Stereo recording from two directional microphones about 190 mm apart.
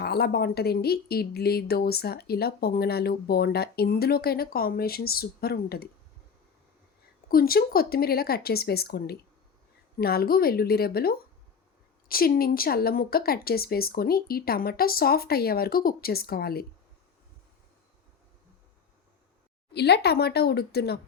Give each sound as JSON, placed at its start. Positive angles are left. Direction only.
{"t": 0.0, "sound": "speech", "side_deg": 55}
{"t": 7.3, "sound": "speech", "side_deg": 50}
{"t": 19.7, "sound": "speech", "side_deg": 60}